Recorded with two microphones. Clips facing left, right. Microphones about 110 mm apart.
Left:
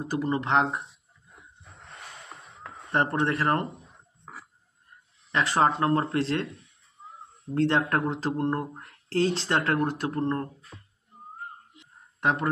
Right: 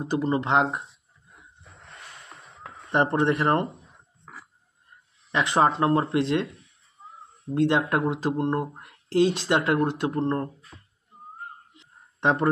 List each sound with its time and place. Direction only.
0.0 s speech: 20° right (ahead or behind)
2.9 s speech: 20° right (ahead or behind)
5.3 s speech: 20° right (ahead or behind)
7.4 s speech: 15° right (ahead or behind)
12.2 s speech: 25° right (ahead or behind)